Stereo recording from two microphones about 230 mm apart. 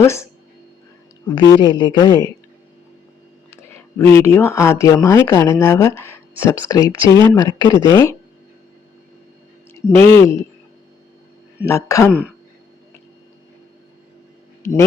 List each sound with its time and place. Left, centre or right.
0.0 s speech: centre
1.6 s speech: centre
3.5 s speech: centre
9.7 s speech: centre
11.6 s speech: centre
14.6 s speech: centre